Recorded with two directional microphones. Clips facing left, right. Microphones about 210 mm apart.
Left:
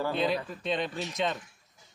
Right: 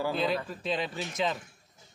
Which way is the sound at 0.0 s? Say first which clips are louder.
Left 1 dB; centre (ahead or behind).